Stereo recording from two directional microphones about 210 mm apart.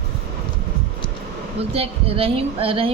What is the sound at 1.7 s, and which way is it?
Speech, 25° right (ahead or behind).